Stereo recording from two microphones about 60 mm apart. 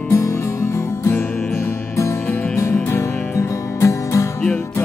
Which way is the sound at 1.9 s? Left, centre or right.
Left.